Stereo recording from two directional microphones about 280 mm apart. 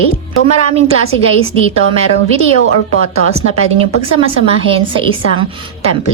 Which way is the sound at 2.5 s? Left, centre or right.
Left.